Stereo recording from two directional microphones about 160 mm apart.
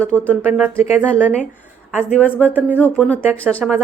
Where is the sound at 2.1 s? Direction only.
10° left (ahead or behind).